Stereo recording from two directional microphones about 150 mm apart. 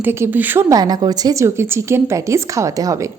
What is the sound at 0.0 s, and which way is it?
A woman's voice, 15° right (ahead or behind).